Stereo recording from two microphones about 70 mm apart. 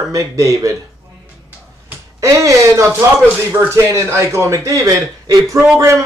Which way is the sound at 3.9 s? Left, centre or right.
Right.